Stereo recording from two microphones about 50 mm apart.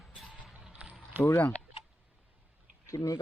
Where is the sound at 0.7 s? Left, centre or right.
Right.